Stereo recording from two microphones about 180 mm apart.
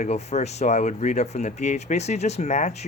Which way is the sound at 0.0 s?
40° left (ahead or behind).